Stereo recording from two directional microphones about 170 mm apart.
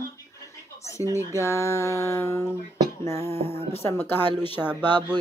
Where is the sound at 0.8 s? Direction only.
15° left (ahead or behind).